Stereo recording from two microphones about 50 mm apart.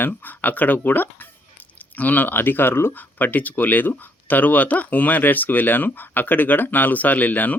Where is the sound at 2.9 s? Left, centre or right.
Left.